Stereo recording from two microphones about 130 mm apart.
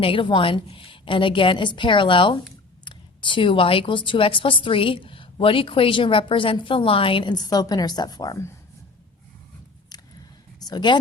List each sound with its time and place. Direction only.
0.0 s speech: 40° left (ahead or behind)
10.6 s speech: 30° left (ahead or behind)